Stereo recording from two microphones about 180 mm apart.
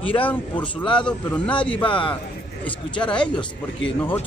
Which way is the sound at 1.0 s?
5° left (ahead or behind).